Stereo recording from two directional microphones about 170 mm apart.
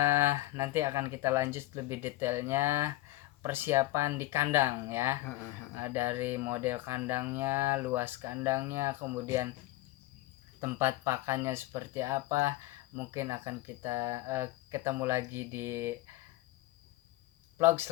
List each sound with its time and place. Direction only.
0.0 s speech: 15° right (ahead or behind)
10.6 s speech: 15° right (ahead or behind)
17.6 s speech: 15° right (ahead or behind)